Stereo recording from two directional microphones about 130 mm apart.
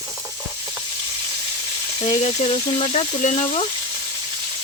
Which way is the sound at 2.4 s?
55° left (ahead or behind).